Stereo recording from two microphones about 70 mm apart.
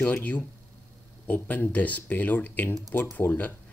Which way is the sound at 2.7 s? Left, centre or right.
Left.